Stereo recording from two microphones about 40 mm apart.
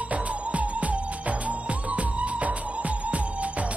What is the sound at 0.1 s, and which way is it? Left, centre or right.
Music, right.